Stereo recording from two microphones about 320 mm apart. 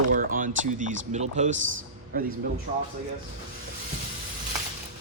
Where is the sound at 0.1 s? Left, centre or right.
Right.